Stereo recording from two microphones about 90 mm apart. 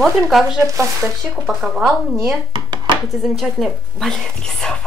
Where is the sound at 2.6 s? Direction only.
60° right (ahead or behind).